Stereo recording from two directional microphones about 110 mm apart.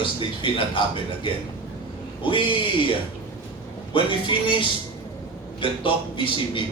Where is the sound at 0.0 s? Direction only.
50° left (ahead or behind).